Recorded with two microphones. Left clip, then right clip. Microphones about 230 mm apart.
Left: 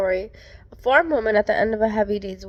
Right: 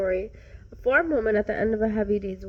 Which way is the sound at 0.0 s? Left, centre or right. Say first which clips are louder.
Left 4 dB; centre.